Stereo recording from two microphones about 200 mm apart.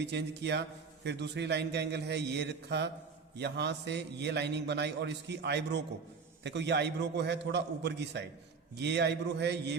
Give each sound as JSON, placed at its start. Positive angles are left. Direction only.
{"t": 0.0, "sound": "a man's voice", "side_deg": -60}